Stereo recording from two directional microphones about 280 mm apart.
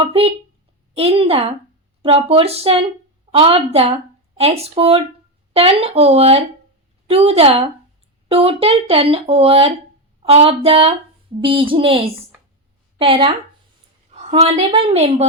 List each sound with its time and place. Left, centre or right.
0.0 s speech: right